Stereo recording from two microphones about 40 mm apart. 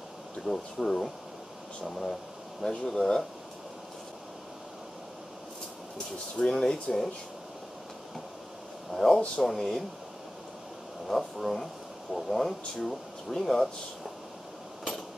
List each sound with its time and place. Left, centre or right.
0.5 s speech: centre
6.3 s speech: centre
8.9 s speech: centre
11.1 s speech: centre